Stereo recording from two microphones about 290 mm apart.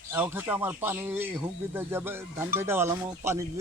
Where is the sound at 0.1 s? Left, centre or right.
Centre.